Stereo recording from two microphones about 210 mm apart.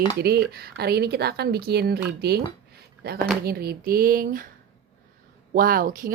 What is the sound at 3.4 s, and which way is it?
Speech, 45° right (ahead or behind).